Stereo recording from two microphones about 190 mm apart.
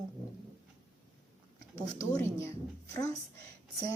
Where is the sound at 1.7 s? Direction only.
15° left (ahead or behind).